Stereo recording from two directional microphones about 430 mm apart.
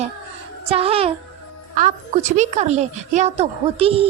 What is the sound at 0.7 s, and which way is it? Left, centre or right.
Speech, centre.